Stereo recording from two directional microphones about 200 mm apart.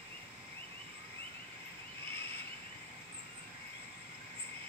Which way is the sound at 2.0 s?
25° right (ahead or behind).